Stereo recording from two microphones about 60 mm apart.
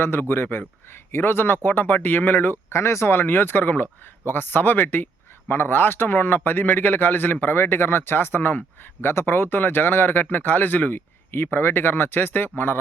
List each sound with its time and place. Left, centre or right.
0.0 s a man's voice: left